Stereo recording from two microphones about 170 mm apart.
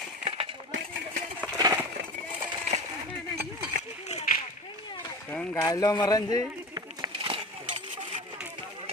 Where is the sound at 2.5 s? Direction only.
40° right (ahead or behind).